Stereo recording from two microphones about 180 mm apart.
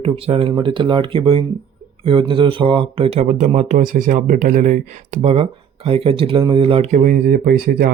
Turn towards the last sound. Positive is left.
turn(degrees=-55)  # may be behind; listen again after turning